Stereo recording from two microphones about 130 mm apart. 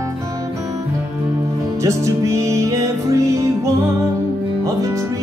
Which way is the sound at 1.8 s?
25° right (ahead or behind).